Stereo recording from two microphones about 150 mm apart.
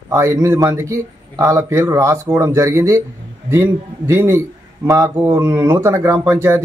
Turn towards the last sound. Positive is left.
turn(degrees=-15)  # may be behind; listen again after turning